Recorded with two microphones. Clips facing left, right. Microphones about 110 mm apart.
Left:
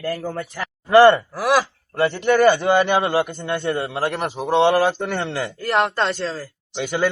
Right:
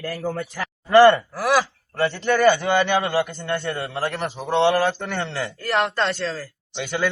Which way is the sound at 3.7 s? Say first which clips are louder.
Left 3 dB; centre (ahead or behind).